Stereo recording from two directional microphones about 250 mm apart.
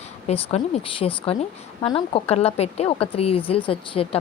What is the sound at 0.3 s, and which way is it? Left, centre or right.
A woman's voice, left.